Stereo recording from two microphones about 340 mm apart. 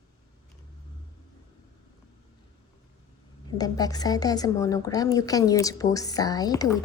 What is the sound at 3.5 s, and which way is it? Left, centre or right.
A woman's voice, centre.